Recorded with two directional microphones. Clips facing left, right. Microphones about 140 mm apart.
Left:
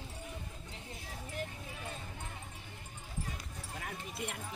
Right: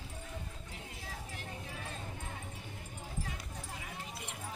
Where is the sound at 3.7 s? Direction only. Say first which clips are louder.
Left 8 dB; 60° left (ahead or behind).